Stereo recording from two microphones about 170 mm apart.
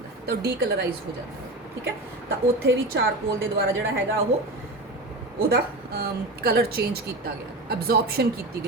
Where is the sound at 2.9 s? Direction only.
90° right.